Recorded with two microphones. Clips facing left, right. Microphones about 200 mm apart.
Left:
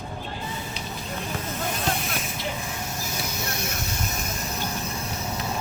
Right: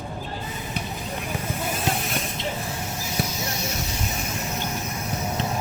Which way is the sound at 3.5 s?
55° left (ahead or behind).